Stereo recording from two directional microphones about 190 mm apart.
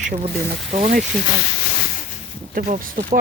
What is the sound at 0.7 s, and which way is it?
Speech, 40° right (ahead or behind).